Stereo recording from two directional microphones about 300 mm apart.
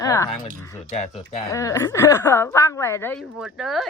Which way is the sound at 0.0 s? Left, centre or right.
Centre.